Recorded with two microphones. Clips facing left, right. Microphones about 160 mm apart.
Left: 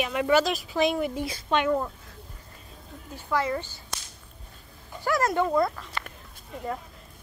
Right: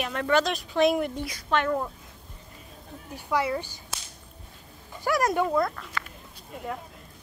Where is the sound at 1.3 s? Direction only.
20° left (ahead or behind).